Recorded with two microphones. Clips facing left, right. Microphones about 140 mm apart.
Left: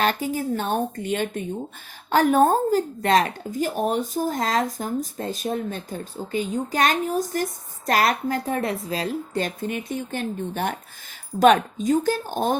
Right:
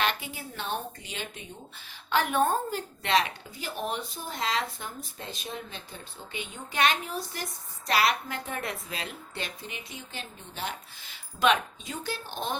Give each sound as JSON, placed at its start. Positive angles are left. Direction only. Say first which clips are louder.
{"t": 0.0, "sound": "a woman's voice", "louder": "left 8 dB", "side_deg": 40}